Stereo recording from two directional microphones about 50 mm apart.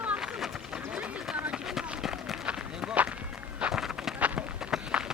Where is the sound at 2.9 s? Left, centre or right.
Right.